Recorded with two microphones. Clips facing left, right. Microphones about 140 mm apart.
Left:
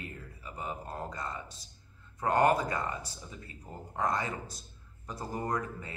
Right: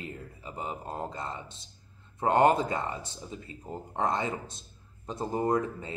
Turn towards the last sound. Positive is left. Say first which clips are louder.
# right 6 dB
turn(degrees=-25)  # may be behind; listen again after turning